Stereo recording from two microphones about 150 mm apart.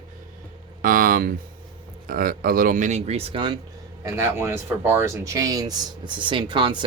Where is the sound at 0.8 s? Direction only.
70° right (ahead or behind).